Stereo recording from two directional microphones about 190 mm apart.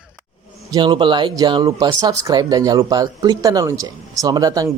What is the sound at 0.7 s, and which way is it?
Speech, 25° right (ahead or behind).